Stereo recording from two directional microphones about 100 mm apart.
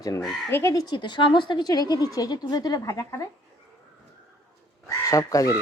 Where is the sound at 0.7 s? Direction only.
50° left (ahead or behind).